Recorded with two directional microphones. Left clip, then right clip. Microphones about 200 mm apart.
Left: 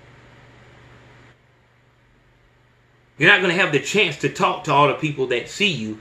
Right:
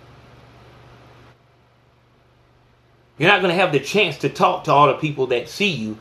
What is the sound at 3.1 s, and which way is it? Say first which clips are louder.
Speech: left 1 dB; 20° right (ahead or behind).